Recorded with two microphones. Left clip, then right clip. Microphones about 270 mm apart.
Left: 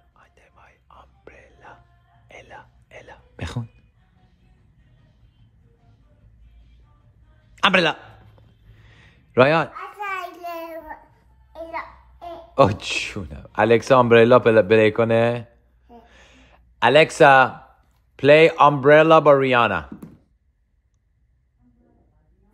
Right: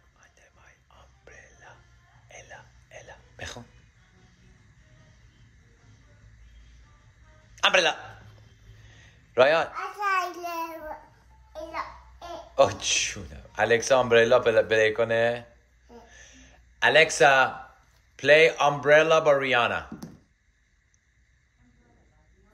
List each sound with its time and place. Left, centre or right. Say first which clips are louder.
0.2 s whispering: left 4 dB; centre
7.5 s a man's voice: left 4 dB; left
8.8 s a sound: left 3 dB; left
10.1 s child singing: right 2 dB; centre
11.5 s music: left 3 dB; centre
12.5 s a man's voice: left 4 dB; left
16.1 s a sound: left 1 dB; centre
18.1 s a man's voice: left 5 dB; centre